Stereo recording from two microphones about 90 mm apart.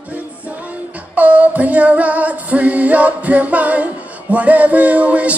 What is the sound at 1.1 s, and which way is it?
Female singing, 15° right (ahead or behind).